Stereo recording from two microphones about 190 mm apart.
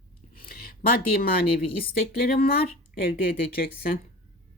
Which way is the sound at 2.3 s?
50° left (ahead or behind).